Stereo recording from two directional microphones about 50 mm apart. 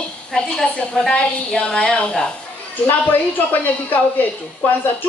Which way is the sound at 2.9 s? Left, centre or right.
Left.